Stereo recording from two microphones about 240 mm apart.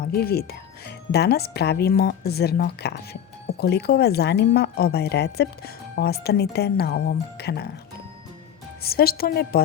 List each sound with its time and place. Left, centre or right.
0.0 s speech: left
8.8 s speech: left